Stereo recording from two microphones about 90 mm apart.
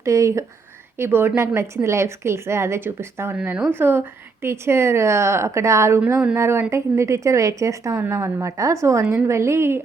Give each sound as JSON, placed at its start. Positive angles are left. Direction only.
{"t": 0.0, "sound": "a woman's voice", "side_deg": -35}